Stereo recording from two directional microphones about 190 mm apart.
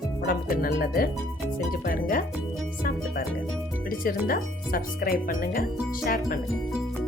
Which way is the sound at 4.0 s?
50° left (ahead or behind).